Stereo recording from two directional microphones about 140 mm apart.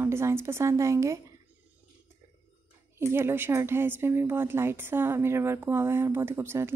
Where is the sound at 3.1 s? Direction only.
15° right (ahead or behind).